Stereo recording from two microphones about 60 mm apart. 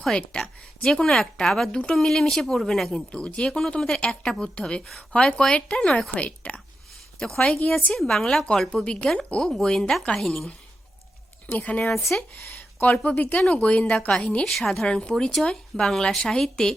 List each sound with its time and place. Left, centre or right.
0.0 s speech: centre
1.7 s speech: centre
2.0 s speech: centre
3.1 s speech: centre
4.6 s speech: centre
7.9 s speech: centre
8.7 s speech: centre
11.5 s speech: left
14.4 s speech: centre